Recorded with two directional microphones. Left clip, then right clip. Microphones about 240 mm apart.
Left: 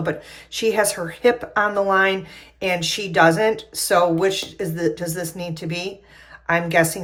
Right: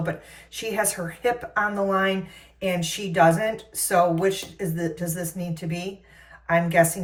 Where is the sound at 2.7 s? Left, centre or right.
Centre.